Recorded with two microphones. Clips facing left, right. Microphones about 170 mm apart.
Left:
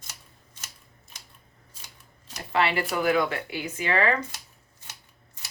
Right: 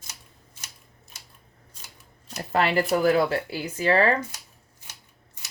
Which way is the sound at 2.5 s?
40° right (ahead or behind).